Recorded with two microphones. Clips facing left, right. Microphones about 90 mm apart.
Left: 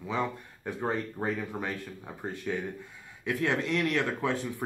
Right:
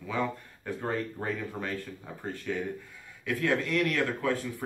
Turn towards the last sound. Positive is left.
turn(degrees=20)  # may be behind; listen again after turning